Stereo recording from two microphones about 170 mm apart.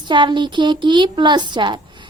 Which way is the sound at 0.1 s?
30° right (ahead or behind).